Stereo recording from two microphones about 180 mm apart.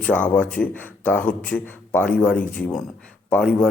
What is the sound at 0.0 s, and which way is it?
A man's voice, 5° left (ahead or behind).